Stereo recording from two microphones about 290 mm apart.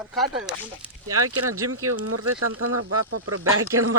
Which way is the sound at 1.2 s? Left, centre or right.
Right.